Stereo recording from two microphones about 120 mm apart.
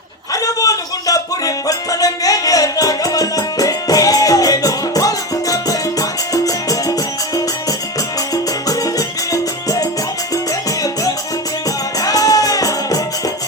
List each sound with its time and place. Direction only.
0.4 s music: 30° left (ahead or behind)
8.3 s music: 30° left (ahead or behind)
11.9 s music: 30° left (ahead or behind)